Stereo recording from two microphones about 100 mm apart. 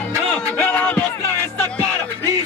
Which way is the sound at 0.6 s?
20° left (ahead or behind).